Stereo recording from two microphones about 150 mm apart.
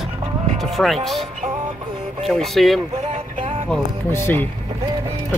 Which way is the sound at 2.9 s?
45° right (ahead or behind).